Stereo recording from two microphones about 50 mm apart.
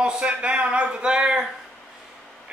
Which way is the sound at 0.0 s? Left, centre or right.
Right.